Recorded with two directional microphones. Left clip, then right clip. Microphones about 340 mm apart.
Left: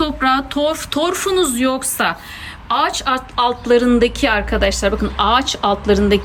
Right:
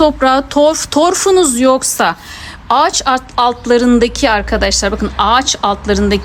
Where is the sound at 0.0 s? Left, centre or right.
Centre.